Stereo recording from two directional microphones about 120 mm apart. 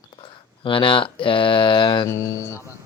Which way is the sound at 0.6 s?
45° left (ahead or behind).